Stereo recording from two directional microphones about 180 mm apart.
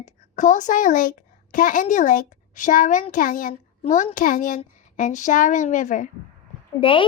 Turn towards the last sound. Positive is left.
turn(degrees=30)  # may be behind; listen again after turning